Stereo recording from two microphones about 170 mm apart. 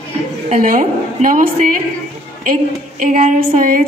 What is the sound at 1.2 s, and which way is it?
A woman's voice, 50° right (ahead or behind).